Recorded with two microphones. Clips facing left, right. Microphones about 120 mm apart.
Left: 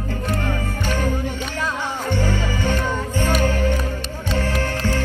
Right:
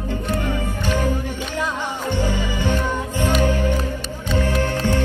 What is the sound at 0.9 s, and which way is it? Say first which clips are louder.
Music: right 1 dB; 15° right (ahead or behind).